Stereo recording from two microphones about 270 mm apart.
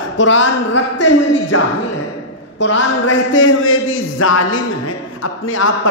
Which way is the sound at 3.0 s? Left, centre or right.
Left.